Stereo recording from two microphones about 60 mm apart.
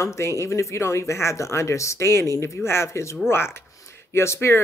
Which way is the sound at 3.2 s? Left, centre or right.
Left.